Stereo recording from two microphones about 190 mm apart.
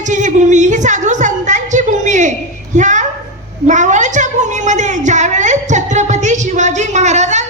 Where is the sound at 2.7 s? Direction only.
40° right (ahead or behind).